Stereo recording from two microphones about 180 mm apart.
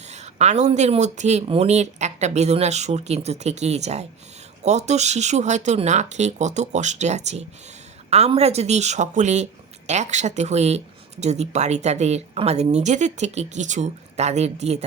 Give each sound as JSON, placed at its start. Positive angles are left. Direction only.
{"t": 0.1, "sound": "speech", "side_deg": -40}